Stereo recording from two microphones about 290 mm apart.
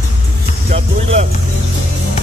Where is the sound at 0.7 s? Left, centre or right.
Right.